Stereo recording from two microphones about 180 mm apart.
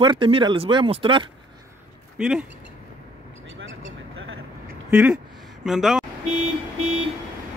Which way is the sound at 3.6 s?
90° right.